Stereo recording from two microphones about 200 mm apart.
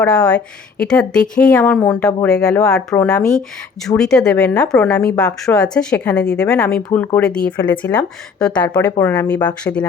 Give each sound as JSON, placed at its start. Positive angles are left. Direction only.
{"t": 0.0, "sound": "a woman's voice", "side_deg": 5}